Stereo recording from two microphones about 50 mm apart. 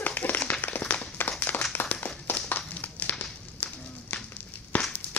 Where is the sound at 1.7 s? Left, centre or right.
Left.